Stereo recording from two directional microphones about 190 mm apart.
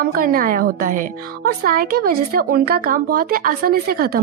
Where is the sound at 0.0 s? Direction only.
50° right (ahead or behind).